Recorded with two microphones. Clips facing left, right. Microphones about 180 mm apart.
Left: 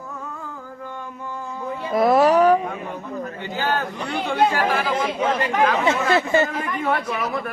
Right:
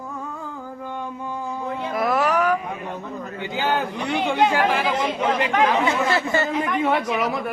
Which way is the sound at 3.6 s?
15° right (ahead or behind).